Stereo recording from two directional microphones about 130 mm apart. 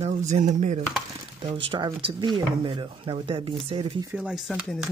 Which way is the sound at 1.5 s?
40° right (ahead or behind).